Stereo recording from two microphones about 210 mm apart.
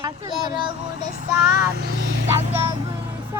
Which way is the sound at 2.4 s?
25° right (ahead or behind).